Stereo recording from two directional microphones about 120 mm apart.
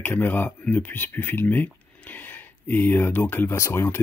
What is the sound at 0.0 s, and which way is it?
Speech, 15° left (ahead or behind).